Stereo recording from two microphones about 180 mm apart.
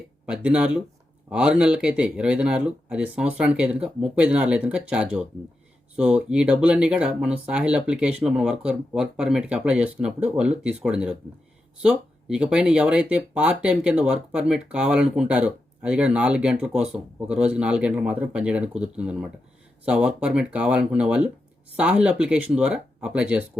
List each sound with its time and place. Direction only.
0.3 s speech: 5° right (ahead or behind)